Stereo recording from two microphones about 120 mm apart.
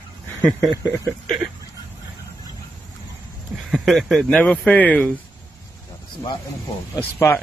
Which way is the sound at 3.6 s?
Centre (ahead or behind).